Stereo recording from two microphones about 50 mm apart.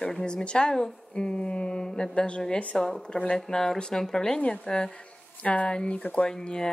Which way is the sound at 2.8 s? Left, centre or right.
Centre.